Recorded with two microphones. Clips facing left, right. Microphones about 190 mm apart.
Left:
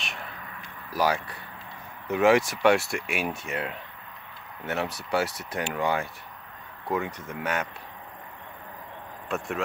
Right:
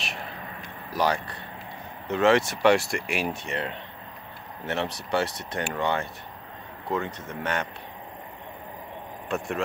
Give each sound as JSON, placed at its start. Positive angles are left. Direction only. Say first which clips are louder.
{"t": 0.1, "sound": "a sound", "louder": "right 3 dB", "side_deg": -30}
{"t": 0.9, "sound": "speech", "louder": "even", "side_deg": 5}
{"t": 9.3, "sound": "speech", "louder": "right 1 dB", "side_deg": 0}